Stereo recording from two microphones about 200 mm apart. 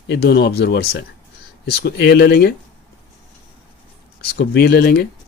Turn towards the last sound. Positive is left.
turn(degrees=50)  # may be behind; listen again after turning